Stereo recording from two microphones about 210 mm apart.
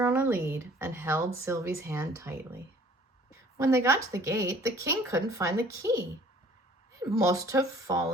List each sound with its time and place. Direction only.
0.0 s a woman's voice: 10° right (ahead or behind)
3.6 s speech: 15° right (ahead or behind)
7.2 s speech: 15° right (ahead or behind)